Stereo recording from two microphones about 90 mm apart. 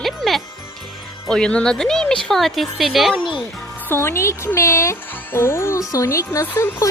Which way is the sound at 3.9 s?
30° left (ahead or behind).